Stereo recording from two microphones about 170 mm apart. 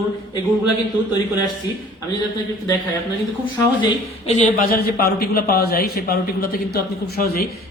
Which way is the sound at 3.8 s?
40° left (ahead or behind).